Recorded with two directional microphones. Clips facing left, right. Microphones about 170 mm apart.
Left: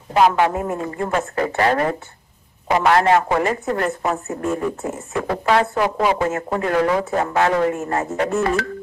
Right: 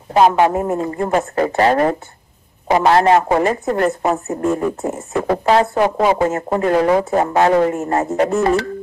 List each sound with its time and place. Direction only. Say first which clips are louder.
0.1 s a woman's voice: right 3 dB; 30° right (ahead or behind)